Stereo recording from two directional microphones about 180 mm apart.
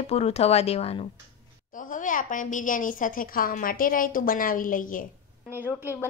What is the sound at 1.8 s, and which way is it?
A woman's voice, 45° left (ahead or behind).